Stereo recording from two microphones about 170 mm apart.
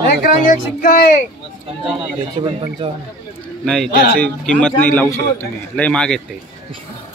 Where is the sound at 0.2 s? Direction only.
55° left (ahead or behind).